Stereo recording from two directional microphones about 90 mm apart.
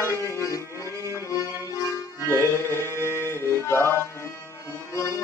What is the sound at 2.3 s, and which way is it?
Music, 30° left (ahead or behind).